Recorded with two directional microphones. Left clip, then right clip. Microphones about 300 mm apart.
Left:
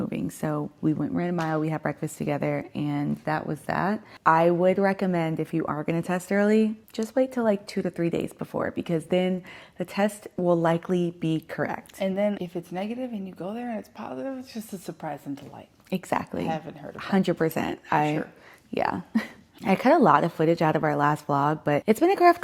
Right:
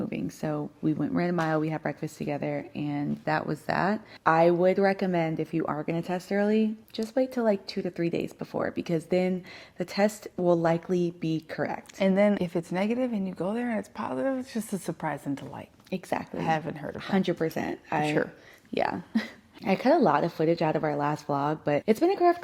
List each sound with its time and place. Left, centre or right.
0.0 s speech: centre
3.3 s speech: centre
11.9 s speech: right
15.9 s speech: centre
16.5 s speech: right
17.0 s speech: centre